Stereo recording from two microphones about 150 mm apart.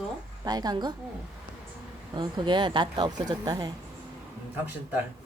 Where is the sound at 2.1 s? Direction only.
30° right (ahead or behind).